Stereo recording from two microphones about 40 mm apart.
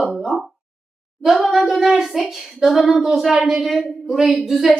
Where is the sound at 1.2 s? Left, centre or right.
Centre.